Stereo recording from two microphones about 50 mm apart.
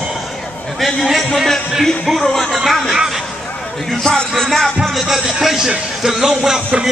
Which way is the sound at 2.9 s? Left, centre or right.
Centre.